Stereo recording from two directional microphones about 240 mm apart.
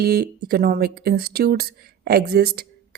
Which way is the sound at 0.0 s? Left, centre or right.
Right.